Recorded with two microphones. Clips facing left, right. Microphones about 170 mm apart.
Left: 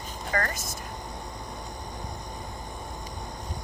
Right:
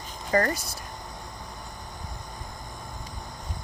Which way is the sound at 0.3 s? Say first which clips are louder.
Right 6 dB; 35° right (ahead or behind).